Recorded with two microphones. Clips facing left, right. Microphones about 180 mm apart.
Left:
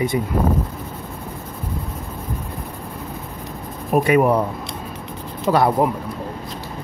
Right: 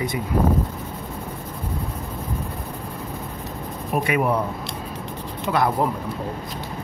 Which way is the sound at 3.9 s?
45° left (ahead or behind).